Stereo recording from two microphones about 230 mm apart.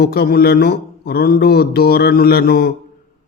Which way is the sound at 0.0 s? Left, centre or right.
Left.